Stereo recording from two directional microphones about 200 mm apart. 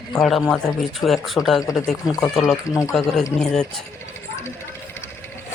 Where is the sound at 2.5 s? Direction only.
15° left (ahead or behind).